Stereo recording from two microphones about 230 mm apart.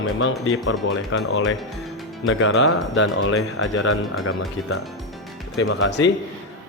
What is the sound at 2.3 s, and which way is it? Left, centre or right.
Speech, left.